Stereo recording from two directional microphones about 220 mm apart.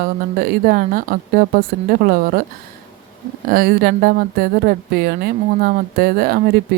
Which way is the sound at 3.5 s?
40° right (ahead or behind).